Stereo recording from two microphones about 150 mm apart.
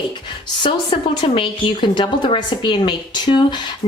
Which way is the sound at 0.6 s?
35° left (ahead or behind).